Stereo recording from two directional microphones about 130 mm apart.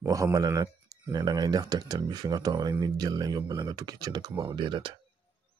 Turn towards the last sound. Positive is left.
turn(degrees=-40)  # may be behind; listen again after turning